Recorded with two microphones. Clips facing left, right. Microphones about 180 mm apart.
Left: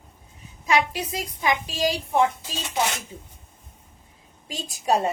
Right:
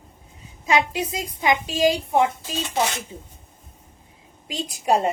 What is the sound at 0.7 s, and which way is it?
A woman's voice, 20° right (ahead or behind).